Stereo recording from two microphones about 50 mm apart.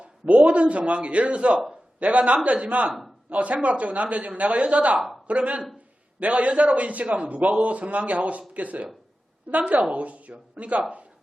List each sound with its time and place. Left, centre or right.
0.0 s a man's voice: right